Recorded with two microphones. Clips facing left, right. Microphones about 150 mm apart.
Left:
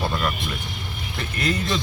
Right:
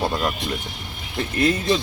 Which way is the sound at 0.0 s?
20° right (ahead or behind).